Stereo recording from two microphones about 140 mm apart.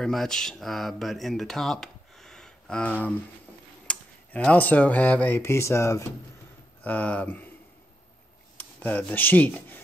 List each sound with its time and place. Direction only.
0.0 s speech: 5° left (ahead or behind)
8.5 s speech: 10° left (ahead or behind)